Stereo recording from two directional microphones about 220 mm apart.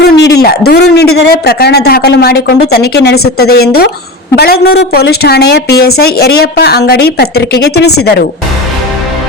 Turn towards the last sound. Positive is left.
turn(degrees=45)  # may be behind; listen again after turning